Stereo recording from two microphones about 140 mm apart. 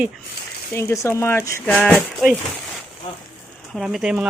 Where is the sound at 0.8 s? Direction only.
20° left (ahead or behind).